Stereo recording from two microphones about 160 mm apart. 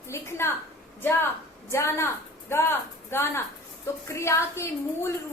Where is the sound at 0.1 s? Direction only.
15° left (ahead or behind).